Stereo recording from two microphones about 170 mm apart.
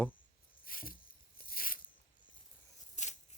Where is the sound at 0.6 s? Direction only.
55° left (ahead or behind).